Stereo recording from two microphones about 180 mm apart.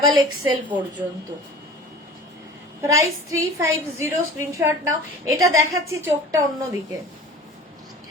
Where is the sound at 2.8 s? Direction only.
15° right (ahead or behind).